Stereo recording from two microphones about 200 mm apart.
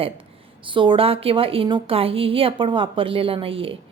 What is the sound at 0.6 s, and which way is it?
A woman's voice, 25° right (ahead or behind).